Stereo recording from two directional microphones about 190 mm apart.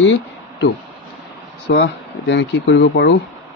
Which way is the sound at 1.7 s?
60° left (ahead or behind).